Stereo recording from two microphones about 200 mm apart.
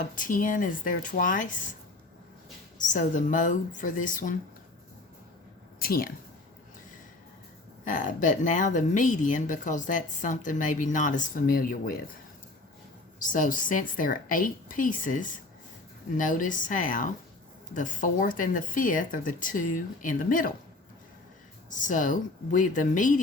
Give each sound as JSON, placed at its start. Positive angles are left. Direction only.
{"t": 0.2, "sound": "speech", "side_deg": 40}
{"t": 2.7, "sound": "speech", "side_deg": 40}
{"t": 5.8, "sound": "speech", "side_deg": 45}
{"t": 7.9, "sound": "speech", "side_deg": 40}
{"t": 13.1, "sound": "speech", "side_deg": 40}
{"t": 21.7, "sound": "speech", "side_deg": 40}